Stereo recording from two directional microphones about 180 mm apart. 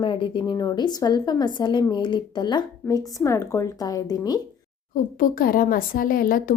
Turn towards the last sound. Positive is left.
turn(degrees=50)  # may be behind; listen again after turning